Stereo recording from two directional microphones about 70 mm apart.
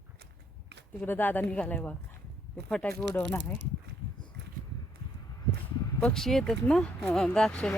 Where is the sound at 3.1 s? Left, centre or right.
Left.